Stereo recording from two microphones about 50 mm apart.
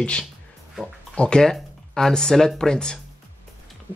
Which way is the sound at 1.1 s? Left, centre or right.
Centre.